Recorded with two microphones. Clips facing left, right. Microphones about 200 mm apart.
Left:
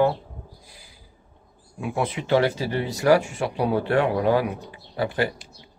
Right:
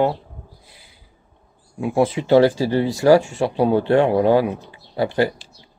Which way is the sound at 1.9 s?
30° right (ahead or behind).